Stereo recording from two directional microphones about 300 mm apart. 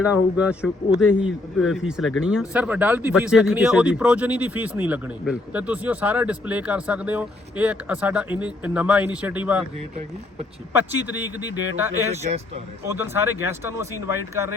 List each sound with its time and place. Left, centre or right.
0.0 s speech: centre
11.2 s speech: centre
12.1 s speech: right
12.9 s speech: centre